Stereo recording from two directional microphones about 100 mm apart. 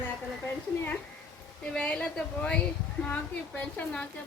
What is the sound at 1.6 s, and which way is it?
A woman's voice, 10° left (ahead or behind).